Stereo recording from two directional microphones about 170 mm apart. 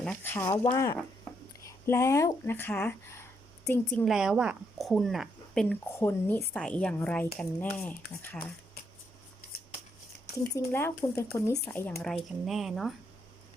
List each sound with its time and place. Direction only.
0.0 s speech: 10° left (ahead or behind)
6.0 s speech: 10° left (ahead or behind)
10.5 s speech: 15° left (ahead or behind)